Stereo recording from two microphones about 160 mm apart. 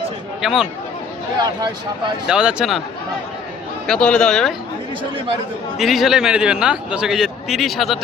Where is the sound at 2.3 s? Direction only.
5° right (ahead or behind).